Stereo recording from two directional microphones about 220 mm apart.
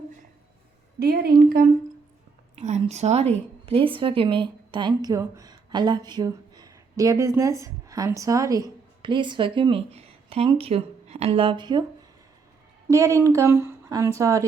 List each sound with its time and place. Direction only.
0.9 s a woman's voice: 45° right (ahead or behind)
2.6 s a woman's voice: 30° right (ahead or behind)
12.9 s speech: 15° right (ahead or behind)